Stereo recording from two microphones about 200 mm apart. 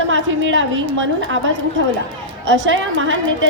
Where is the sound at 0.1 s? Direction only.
70° right (ahead or behind).